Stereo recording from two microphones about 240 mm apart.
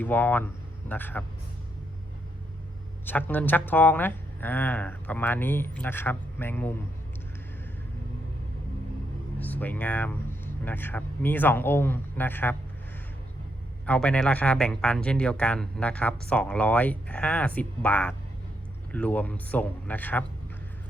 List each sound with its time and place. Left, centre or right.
0.0 s speech: centre
3.1 s speech: centre
9.4 s speech: centre
13.8 s speech: centre